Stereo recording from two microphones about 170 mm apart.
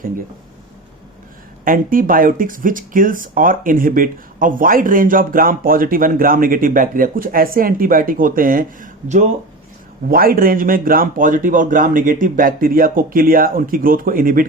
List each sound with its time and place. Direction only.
1.6 s speech: 55° right (ahead or behind)